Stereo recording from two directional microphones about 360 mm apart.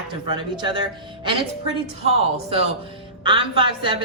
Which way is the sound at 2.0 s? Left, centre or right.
Centre.